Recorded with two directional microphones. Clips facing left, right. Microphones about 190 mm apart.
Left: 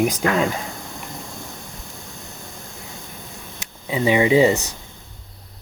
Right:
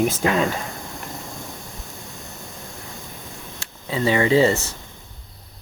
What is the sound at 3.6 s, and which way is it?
Speech, 15° left (ahead or behind).